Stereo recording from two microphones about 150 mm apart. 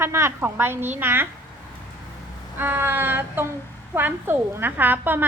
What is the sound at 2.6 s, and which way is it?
A woman's voice, 15° right (ahead or behind).